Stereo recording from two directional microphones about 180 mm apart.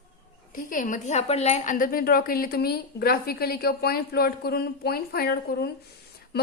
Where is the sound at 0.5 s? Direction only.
50° left (ahead or behind).